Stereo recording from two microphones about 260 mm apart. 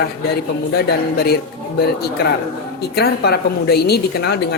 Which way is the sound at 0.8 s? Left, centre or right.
Left.